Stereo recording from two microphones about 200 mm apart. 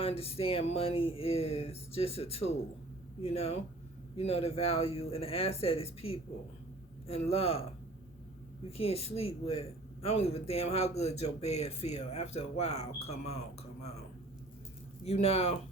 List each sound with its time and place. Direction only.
0.0 s a sound: 30° left (ahead or behind)
3.2 s speech: 30° left (ahead or behind)
4.2 s a sound: 30° left (ahead or behind)
7.1 s speech: 30° left (ahead or behind)
8.7 s speech: 30° left (ahead or behind)
15.0 s speech: 30° left (ahead or behind)